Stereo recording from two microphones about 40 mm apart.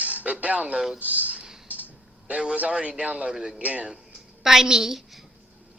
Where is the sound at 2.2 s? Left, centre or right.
Right.